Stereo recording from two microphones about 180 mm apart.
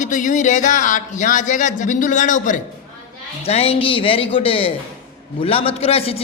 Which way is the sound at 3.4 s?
35° left (ahead or behind).